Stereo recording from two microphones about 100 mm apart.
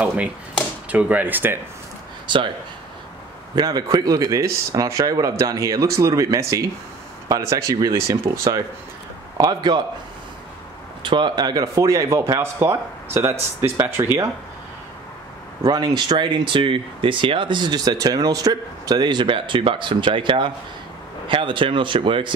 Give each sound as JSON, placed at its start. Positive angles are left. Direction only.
{"t": 0.8, "sound": "speech", "side_deg": -15}
{"t": 2.2, "sound": "speech", "side_deg": -55}
{"t": 3.5, "sound": "speech", "side_deg": -40}
{"t": 9.4, "sound": "speech", "side_deg": -45}
{"t": 11.0, "sound": "speech", "side_deg": -50}
{"t": 15.6, "sound": "speech", "side_deg": -40}